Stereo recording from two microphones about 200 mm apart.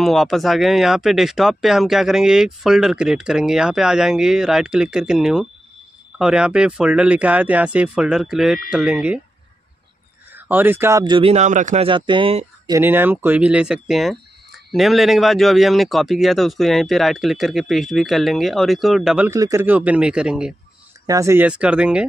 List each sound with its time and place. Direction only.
0.0 s speech: centre (ahead or behind)
10.3 s a man's voice: 10° right (ahead or behind); by 12.7 s 25° right (ahead or behind)
12.7 s speech: 10° right (ahead or behind)
21.1 s speech: 15° right (ahead or behind)